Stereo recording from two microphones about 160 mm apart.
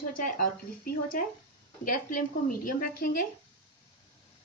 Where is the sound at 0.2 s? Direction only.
60° left (ahead or behind).